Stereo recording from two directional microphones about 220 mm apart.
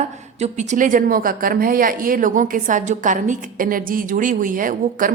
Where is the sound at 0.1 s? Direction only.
30° right (ahead or behind).